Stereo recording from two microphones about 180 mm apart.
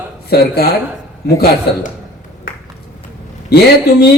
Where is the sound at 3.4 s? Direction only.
60° left (ahead or behind).